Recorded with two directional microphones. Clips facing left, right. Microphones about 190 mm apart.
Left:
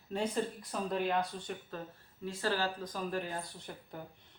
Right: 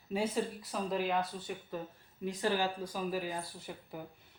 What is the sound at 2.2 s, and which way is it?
Speech, 15° right (ahead or behind).